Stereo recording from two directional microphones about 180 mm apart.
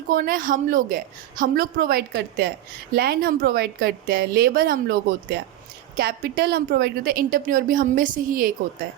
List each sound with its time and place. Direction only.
0.1 s a woman's voice: 50° right (ahead or behind)